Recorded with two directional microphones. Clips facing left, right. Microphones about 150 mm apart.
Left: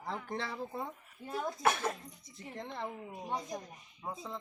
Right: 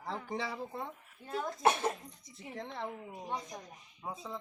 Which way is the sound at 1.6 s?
25° right (ahead or behind).